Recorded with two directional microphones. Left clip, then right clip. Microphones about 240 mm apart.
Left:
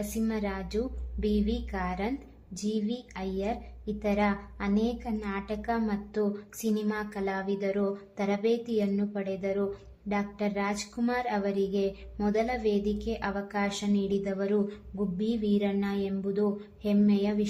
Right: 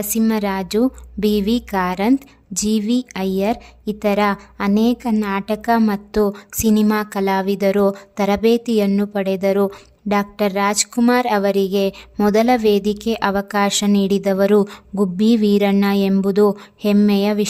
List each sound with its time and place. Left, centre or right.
0.2 s a woman's voice: right